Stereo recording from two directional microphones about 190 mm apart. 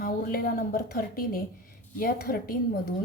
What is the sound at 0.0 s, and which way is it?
A woman's voice, 50° left (ahead or behind).